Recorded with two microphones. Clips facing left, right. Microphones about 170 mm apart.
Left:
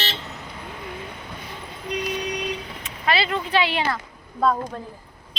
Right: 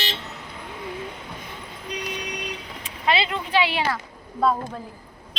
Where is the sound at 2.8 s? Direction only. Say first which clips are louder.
Right 1 dB; 20° right (ahead or behind).